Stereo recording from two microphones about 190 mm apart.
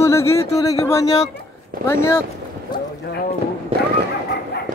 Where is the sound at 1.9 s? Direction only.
15° left (ahead or behind).